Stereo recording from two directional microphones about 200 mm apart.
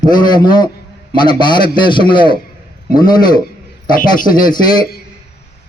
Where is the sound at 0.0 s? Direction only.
20° left (ahead or behind).